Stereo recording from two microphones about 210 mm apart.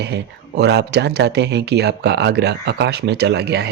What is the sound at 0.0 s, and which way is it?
Speech, 50° right (ahead or behind).